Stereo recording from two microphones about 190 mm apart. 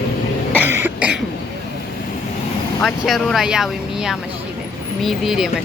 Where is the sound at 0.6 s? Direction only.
10° right (ahead or behind).